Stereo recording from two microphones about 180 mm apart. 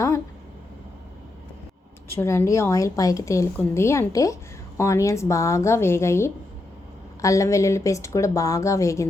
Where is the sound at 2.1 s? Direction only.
15° left (ahead or behind).